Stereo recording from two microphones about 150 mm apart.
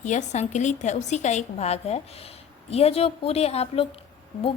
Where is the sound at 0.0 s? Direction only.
55° left (ahead or behind).